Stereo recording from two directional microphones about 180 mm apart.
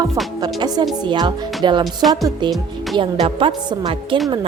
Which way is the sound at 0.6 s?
25° right (ahead or behind).